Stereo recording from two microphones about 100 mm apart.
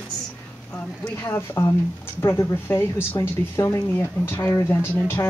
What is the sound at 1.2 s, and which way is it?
Speech, 25° left (ahead or behind).